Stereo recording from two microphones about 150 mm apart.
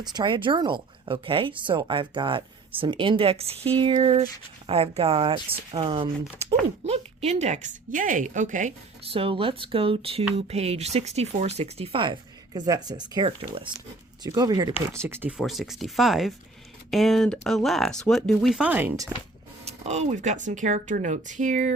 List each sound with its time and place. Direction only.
0.0 s speech: 30° right (ahead or behind); by 8.7 s 55° right (ahead or behind)
9.0 s speech: 40° right (ahead or behind)
12.5 s speech: 25° right (ahead or behind)
14.8 s speech: 15° right (ahead or behind)
15.4 s speech: centre (ahead or behind)
19.6 s speech: 45° right (ahead or behind)